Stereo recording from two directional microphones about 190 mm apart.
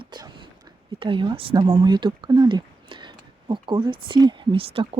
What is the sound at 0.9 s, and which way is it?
Speech, 25° right (ahead or behind).